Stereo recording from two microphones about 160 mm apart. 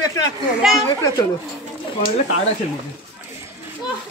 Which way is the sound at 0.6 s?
5° right (ahead or behind).